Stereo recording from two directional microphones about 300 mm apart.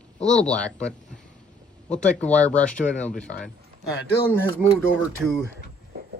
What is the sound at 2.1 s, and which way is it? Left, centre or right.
Speech, centre.